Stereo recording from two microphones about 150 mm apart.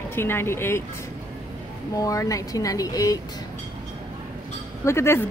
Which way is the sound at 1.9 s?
20° left (ahead or behind).